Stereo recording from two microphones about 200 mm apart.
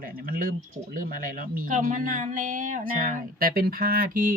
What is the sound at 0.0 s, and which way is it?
A woman's voice, 45° right (ahead or behind).